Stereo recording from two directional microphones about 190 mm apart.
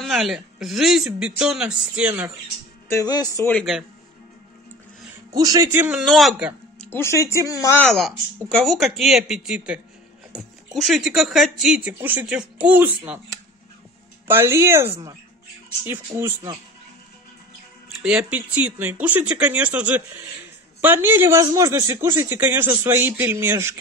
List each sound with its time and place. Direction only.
0.0 s speech: centre (ahead or behind)
2.9 s speech: 20° left (ahead or behind)
3.5 s speech: centre (ahead or behind)
5.3 s speech: 20° right (ahead or behind)
5.9 s speech: centre (ahead or behind)
6.9 s speech: 15° left (ahead or behind)
8.5 s speech: centre (ahead or behind)
14.2 s speech: 15° right (ahead or behind)
16.2 s speech: 15° right (ahead or behind)
17.8 s speech: 5° right (ahead or behind)